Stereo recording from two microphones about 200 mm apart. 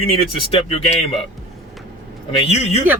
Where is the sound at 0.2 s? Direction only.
30° left (ahead or behind).